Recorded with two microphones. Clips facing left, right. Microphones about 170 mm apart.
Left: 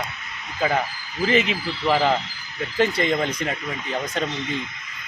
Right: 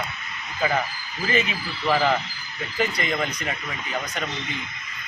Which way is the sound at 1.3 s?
25° left (ahead or behind).